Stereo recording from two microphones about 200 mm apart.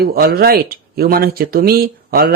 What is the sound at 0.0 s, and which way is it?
Speech, 50° right (ahead or behind).